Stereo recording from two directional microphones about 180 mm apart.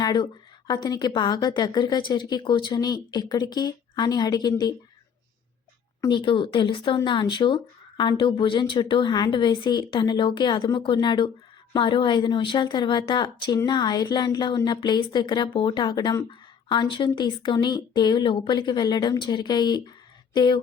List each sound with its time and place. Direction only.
0.0 s a woman's voice: 25° left (ahead or behind)
6.0 s a woman's voice: 25° left (ahead or behind)